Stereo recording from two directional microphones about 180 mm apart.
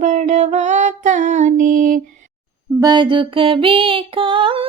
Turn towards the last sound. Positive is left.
turn(degrees=-30)  # may be behind; listen again after turning